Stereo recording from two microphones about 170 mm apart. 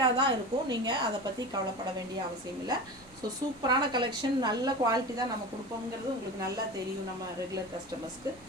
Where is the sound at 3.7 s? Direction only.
25° right (ahead or behind).